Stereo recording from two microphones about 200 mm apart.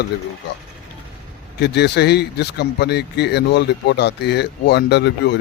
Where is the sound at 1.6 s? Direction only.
55° left (ahead or behind).